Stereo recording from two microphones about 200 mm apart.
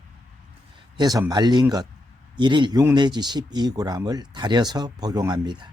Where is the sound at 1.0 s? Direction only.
20° right (ahead or behind).